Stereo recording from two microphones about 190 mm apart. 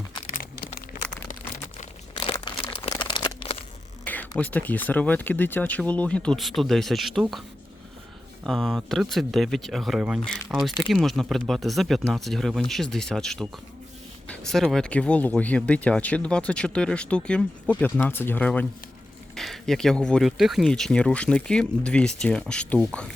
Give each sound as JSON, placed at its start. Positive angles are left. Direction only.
{"t": 1.3, "sound": "crumpling", "side_deg": 40}
{"t": 2.3, "sound": "crumpling", "side_deg": 25}
{"t": 4.0, "sound": "speech", "side_deg": 10}
{"t": 8.4, "sound": "speech", "side_deg": 0}